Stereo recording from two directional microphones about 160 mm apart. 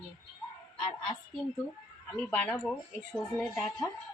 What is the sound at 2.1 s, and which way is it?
Speech, 10° left (ahead or behind).